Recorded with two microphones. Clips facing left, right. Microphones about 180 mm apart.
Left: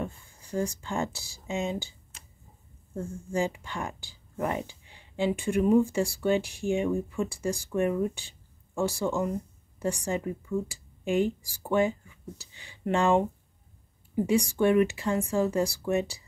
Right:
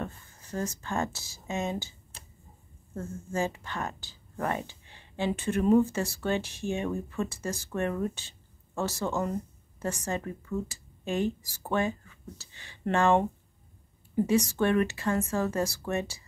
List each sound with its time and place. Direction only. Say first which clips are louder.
0.0 s speech: left 2 dB; 15° left (ahead or behind)